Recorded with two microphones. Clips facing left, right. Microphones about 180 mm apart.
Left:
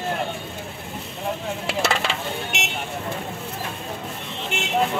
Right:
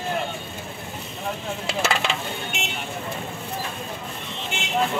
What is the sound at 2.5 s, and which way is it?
Vehicle, 75° left (ahead or behind).